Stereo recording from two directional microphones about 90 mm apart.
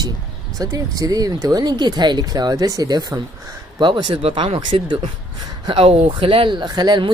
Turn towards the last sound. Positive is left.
turn(degrees=-55)  # may be behind; listen again after turning